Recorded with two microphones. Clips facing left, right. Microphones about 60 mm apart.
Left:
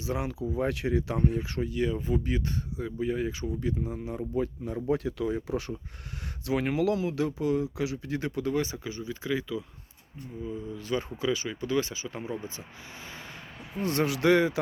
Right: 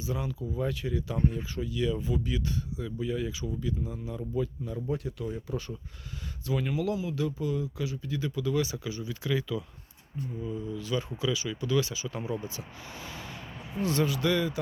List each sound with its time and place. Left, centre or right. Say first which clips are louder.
0.0 s speech: left 3 dB; left
1.6 s speech: right 1 dB; left
3.6 s speech: left 3 dB; left
4.9 s speech: left 7 dB; left
6.4 s speech: left 4 dB; left
10.8 s speech: left 2 dB; left
12.0 s speech: right 1 dB; left
14.0 s speech: left 6 dB; left